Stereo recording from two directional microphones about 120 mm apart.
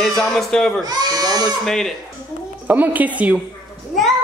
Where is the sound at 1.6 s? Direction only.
5° left (ahead or behind).